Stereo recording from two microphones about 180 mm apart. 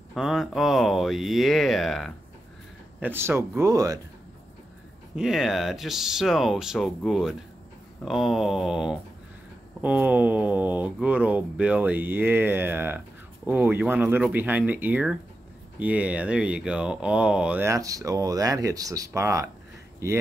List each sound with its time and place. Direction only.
0.1 s speech: centre (ahead or behind)
3.0 s speech: 10° right (ahead or behind)
5.1 s speech: 5° right (ahead or behind)